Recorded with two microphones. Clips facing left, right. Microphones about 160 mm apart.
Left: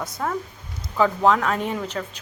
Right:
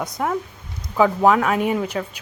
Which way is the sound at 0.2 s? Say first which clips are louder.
Right 3 dB; 10° right (ahead or behind).